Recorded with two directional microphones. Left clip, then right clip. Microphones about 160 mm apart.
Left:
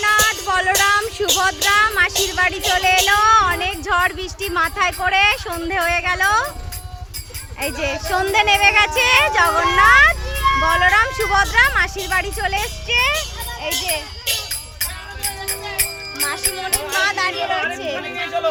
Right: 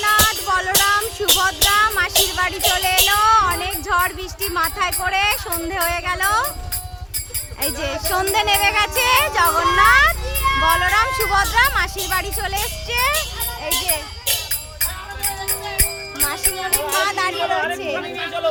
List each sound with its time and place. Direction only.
0.0 s music: 10° left (ahead or behind)
7.6 s speech: 10° left (ahead or behind)
10.3 s music: 20° left (ahead or behind)
10.7 s speech: 10° left (ahead or behind)
14.8 s music: 5° left (ahead or behind)